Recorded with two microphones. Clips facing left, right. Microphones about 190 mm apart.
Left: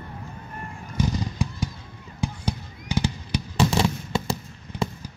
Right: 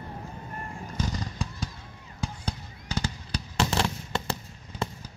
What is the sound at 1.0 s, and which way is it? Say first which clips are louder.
Fireworks: left 8 dB; 15° left (ahead or behind).